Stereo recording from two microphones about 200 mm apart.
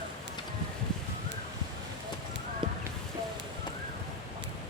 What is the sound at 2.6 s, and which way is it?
Clip-clop, 25° right (ahead or behind).